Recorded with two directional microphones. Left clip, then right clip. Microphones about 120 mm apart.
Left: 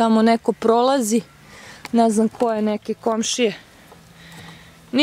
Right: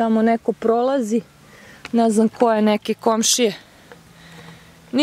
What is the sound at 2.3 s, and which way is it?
Speech, 40° right (ahead or behind).